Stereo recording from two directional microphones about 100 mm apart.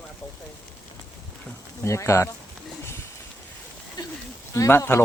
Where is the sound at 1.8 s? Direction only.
30° left (ahead or behind).